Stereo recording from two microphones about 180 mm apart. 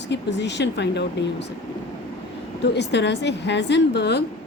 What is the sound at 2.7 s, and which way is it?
Speech, 75° left (ahead or behind).